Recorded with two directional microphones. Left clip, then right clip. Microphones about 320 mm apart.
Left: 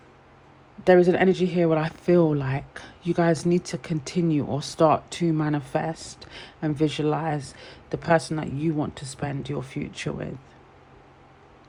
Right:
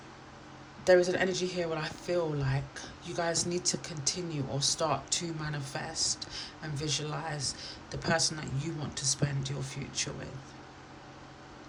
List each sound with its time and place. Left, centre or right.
0.9 s speech: left